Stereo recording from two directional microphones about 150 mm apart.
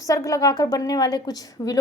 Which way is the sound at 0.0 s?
20° left (ahead or behind).